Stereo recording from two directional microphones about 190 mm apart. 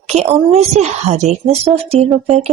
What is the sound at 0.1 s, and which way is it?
Speech, 35° right (ahead or behind).